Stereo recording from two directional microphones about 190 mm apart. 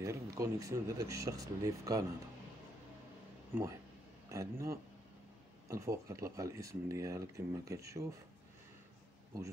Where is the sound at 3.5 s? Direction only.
10° right (ahead or behind).